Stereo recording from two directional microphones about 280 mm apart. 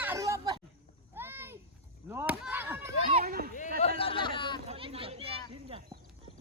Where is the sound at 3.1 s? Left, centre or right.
Right.